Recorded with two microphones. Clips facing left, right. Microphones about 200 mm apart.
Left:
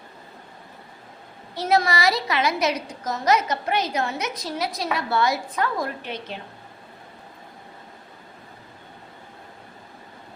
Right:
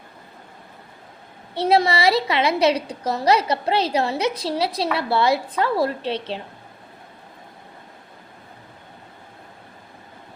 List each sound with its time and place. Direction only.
1.6 s a woman's voice: 30° right (ahead or behind)